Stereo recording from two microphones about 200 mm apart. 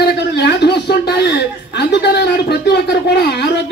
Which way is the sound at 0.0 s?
55° left (ahead or behind).